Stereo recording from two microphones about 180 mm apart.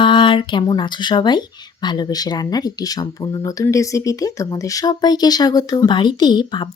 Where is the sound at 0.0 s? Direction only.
25° left (ahead or behind).